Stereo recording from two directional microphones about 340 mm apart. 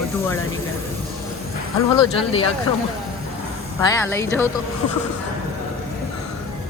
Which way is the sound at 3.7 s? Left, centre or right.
Centre.